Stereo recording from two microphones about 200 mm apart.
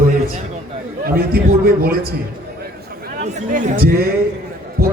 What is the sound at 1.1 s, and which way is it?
Speech, 50° right (ahead or behind).